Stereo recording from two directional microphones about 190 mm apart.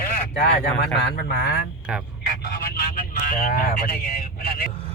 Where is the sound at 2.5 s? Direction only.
55° left (ahead or behind).